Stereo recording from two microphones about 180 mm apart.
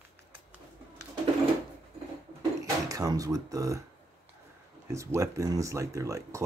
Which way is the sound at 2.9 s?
20° right (ahead or behind).